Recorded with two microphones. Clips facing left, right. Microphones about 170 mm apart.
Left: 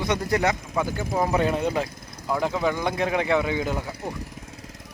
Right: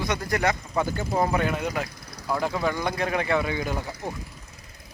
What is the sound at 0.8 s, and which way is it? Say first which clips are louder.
Speech: even; 5° left (ahead or behind).